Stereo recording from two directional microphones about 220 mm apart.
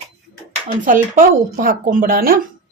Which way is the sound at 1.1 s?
40° right (ahead or behind).